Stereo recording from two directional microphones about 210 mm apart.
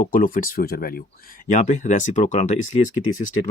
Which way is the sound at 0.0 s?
40° left (ahead or behind).